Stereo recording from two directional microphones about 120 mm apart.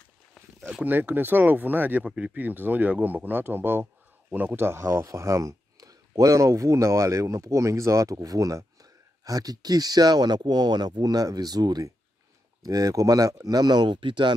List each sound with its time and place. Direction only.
0.7 s speech: 15° right (ahead or behind); by 14.3 s 40° right (ahead or behind)